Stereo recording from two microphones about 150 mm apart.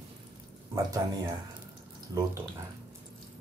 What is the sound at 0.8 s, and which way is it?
Speech, 25° right (ahead or behind).